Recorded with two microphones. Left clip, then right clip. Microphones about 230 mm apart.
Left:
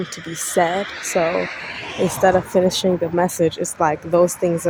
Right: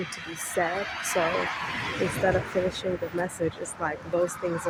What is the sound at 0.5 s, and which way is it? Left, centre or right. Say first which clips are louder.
Speech: left 9 dB; left.